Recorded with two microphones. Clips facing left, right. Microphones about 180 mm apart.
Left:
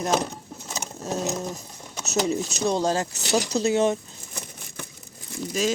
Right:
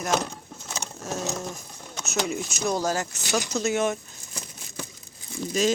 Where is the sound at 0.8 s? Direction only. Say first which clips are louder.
Left 3 dB; 20° left (ahead or behind).